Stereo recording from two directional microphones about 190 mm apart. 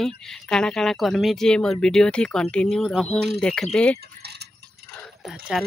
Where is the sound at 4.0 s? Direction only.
60° right (ahead or behind).